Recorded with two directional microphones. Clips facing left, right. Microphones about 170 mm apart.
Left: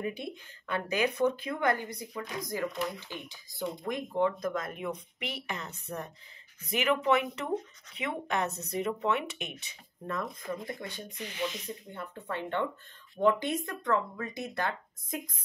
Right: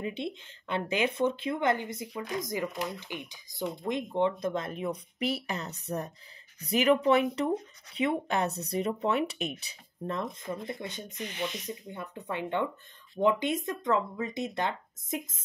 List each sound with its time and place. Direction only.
0.0 s speech: 25° right (ahead or behind)